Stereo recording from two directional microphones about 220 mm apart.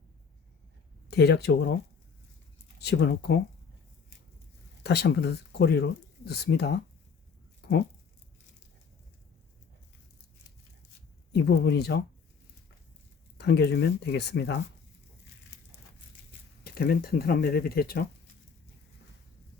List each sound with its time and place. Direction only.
1.0 s speech: 50° left (ahead or behind)
2.7 s speech: 50° left (ahead or behind)
4.8 s speech: 50° left (ahead or behind)
11.3 s speech: 50° left (ahead or behind)
13.4 s speech: 50° left (ahead or behind)
16.6 s speech: 45° left (ahead or behind)